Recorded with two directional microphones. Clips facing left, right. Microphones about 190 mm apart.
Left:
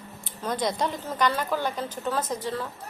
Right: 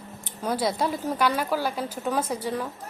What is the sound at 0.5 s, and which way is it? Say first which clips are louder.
A woman's voice: right 2 dB; 5° right (ahead or behind).